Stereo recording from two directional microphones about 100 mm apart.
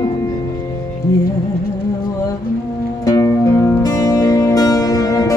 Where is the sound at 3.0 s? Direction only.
35° left (ahead or behind).